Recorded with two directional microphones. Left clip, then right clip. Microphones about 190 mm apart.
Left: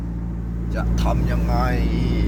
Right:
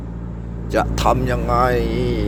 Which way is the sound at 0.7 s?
40° right (ahead or behind).